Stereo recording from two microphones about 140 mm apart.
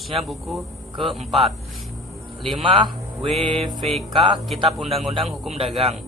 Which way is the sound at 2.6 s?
35° right (ahead or behind).